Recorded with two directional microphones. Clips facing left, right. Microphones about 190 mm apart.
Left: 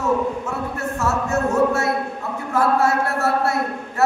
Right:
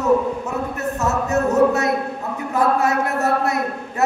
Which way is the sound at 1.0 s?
20° right (ahead or behind).